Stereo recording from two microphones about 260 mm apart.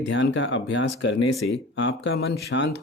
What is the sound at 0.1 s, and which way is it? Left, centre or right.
Speech, left.